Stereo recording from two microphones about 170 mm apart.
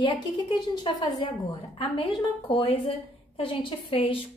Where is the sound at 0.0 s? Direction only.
25° left (ahead or behind).